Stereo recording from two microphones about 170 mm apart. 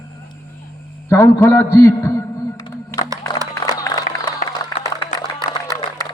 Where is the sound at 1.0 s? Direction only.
15° left (ahead or behind).